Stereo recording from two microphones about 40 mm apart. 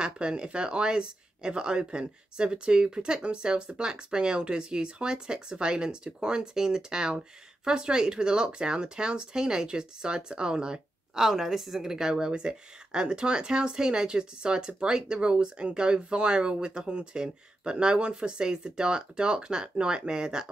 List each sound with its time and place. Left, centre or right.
0.0 s speech: right